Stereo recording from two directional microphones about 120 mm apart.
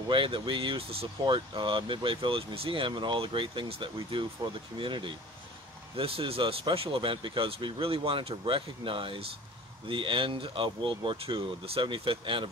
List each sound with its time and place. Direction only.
0.1 s speech: 45° right (ahead or behind)